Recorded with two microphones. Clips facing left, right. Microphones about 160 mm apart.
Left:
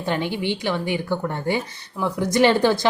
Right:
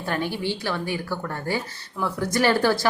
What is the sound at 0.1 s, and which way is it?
A woman's voice, 20° left (ahead or behind).